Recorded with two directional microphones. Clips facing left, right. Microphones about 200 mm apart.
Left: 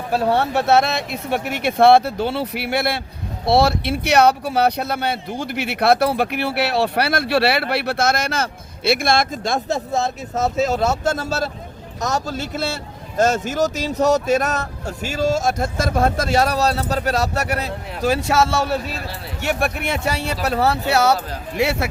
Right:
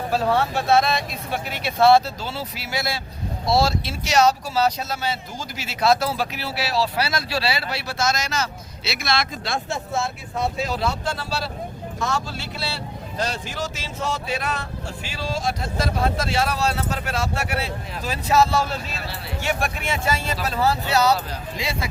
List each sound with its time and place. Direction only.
0.3 s a man's voice: 65° left (ahead or behind); by 17.7 s 40° left (ahead or behind)
18.2 s a man's voice: 75° left (ahead or behind)
19.4 s a man's voice: 60° left (ahead or behind)